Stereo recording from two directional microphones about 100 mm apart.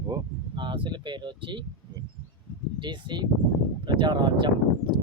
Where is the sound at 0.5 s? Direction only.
50° right (ahead or behind).